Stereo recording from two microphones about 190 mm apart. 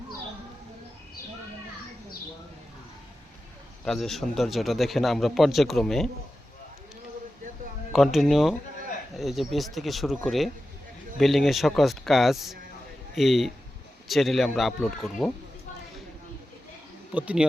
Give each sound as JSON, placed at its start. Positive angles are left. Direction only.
{"t": 3.8, "sound": "speech", "side_deg": 0}
{"t": 7.9, "sound": "speech", "side_deg": 0}
{"t": 17.2, "sound": "speech", "side_deg": -5}